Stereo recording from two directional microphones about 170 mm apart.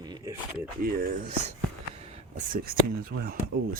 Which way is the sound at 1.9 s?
40° right (ahead or behind).